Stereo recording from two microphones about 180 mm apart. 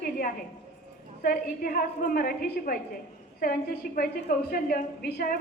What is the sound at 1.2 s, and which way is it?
A woman's voice, 55° left (ahead or behind).